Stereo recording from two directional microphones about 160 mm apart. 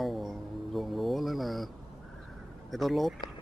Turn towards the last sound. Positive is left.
turn(degrees=0)  # may be behind; listen again after turning